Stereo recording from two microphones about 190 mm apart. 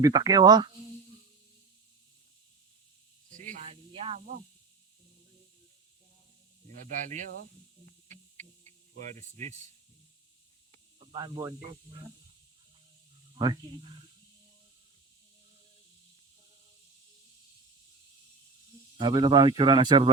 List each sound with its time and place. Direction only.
0.0 s speech: 20° right (ahead or behind)
3.2 s snake: 40° right (ahead or behind)
6.9 s snake: 40° right (ahead or behind)
9.1 s speech: 40° right (ahead or behind)
11.0 s speech: 25° right (ahead or behind)
18.9 s speech: 25° right (ahead or behind)